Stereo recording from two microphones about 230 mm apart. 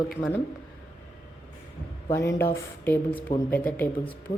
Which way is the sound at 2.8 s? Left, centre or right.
Centre.